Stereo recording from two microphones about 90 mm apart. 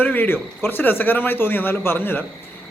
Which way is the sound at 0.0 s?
20° left (ahead or behind).